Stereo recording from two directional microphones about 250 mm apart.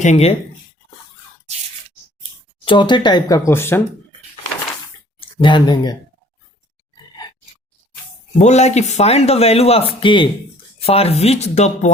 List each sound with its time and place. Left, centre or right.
0.0 s speech: left
2.6 s speech: centre
5.2 s speech: centre
8.4 s speech: left